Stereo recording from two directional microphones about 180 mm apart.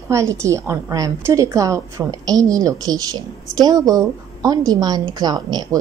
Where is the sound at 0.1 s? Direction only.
15° right (ahead or behind).